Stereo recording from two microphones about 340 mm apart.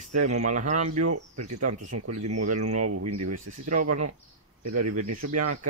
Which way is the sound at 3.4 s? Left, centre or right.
Right.